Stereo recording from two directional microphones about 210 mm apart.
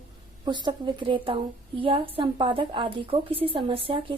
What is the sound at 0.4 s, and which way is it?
A woman's voice, 20° right (ahead or behind).